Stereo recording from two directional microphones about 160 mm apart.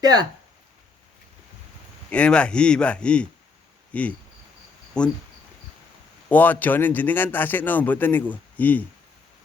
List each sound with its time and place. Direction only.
0.0 s speech: 25° right (ahead or behind)
2.0 s a man's voice: 5° left (ahead or behind)
4.9 s cricket: 5° left (ahead or behind)
6.2 s a man's voice: 10° left (ahead or behind)